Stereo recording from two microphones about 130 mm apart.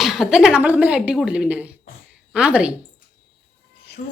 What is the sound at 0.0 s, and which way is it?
Speech, 5° right (ahead or behind).